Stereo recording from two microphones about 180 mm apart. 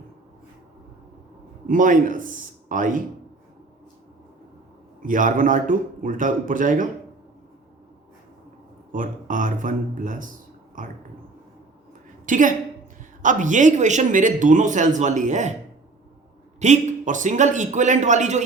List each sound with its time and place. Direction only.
1.6 s a man's voice: 45° right (ahead or behind)
5.0 s a man's voice: 50° right (ahead or behind)
8.9 s a man's voice: 45° right (ahead or behind)
12.2 s a woman's voice: 45° right (ahead or behind)
16.6 s a man's voice: 40° right (ahead or behind)